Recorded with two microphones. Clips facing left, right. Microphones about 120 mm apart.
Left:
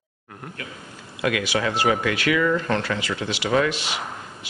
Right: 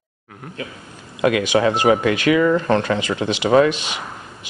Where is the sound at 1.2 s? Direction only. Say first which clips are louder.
Right 7 dB; 25° right (ahead or behind).